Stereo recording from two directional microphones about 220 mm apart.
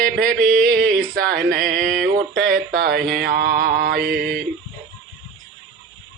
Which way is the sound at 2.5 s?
40° right (ahead or behind).